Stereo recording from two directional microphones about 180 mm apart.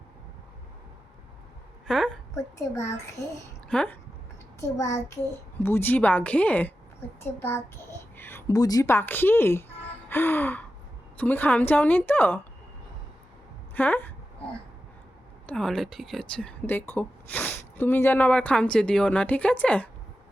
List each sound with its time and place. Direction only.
1.9 s a woman's voice: centre (ahead or behind)
2.3 s a child's voice: 15° left (ahead or behind)
10.1 s gasp: 10° left (ahead or behind)
11.2 s speech: 10° left (ahead or behind)
13.7 s speech: 10° left (ahead or behind)
15.4 s speech: 5° left (ahead or behind)